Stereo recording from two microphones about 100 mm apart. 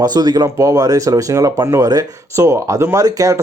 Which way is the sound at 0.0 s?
45° right (ahead or behind).